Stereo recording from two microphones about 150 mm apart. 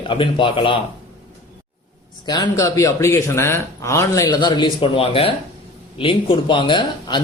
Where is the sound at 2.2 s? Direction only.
25° left (ahead or behind).